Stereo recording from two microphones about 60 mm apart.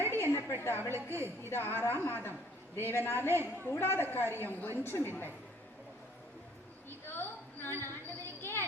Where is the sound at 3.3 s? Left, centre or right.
Right.